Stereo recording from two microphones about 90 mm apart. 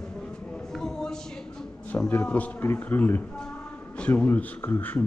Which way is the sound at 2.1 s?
15° left (ahead or behind).